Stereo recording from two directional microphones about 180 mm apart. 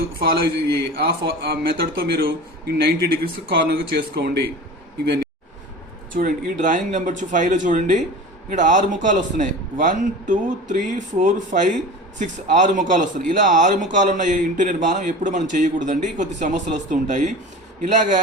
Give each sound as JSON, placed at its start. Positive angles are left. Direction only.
{"t": 0.2, "sound": "a man's voice", "side_deg": -60}
{"t": 6.1, "sound": "a man's voice", "side_deg": -50}